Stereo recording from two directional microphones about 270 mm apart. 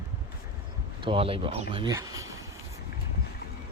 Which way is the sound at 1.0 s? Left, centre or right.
Centre.